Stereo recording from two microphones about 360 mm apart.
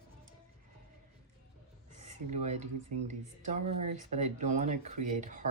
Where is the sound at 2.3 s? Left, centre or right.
Centre.